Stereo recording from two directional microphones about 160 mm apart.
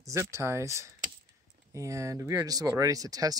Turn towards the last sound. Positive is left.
turn(degrees=-20)  # may be behind; listen again after turning